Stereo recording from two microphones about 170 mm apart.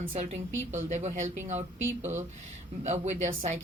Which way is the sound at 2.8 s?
40° right (ahead or behind).